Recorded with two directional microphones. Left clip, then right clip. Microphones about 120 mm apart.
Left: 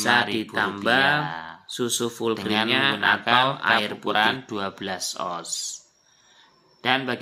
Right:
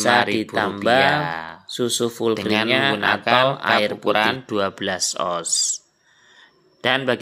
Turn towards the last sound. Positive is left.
turn(degrees=-35)  # may be behind; listen again after turning